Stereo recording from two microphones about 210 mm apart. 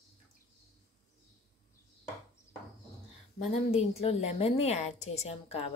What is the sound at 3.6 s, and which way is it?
A woman's voice, 30° left (ahead or behind).